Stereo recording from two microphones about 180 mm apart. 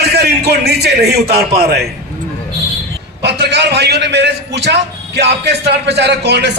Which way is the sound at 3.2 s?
65° right (ahead or behind).